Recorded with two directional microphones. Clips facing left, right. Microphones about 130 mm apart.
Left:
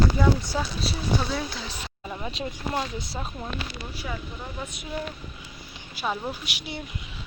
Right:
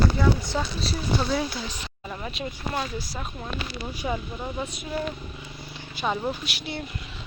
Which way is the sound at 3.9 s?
15° right (ahead or behind).